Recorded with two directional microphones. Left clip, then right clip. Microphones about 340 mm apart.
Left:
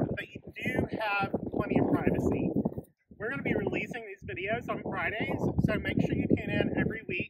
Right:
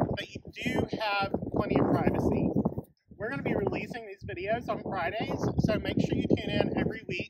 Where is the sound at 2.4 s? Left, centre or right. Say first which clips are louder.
Right 2 dB; centre.